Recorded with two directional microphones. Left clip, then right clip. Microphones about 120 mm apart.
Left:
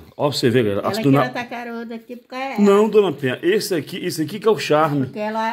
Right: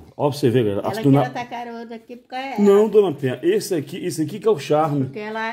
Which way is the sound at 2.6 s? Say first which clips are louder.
Even; 25° right (ahead or behind).